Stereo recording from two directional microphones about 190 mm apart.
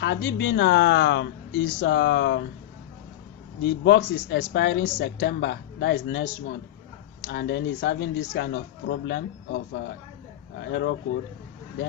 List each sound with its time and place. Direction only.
0.0 s speech: 65° left (ahead or behind)
3.6 s speech: 70° left (ahead or behind)